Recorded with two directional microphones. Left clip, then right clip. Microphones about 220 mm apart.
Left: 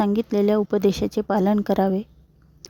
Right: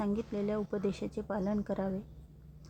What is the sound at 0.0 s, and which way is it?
Speech, 45° left (ahead or behind).